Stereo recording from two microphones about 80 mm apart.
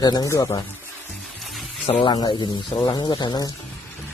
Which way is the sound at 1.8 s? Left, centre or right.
Left.